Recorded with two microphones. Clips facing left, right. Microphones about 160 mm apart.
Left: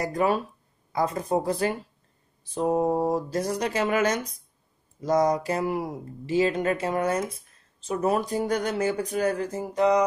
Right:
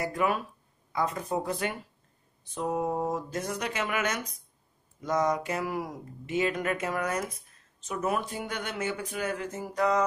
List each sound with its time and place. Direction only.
0.0 s speech: 35° left (ahead or behind)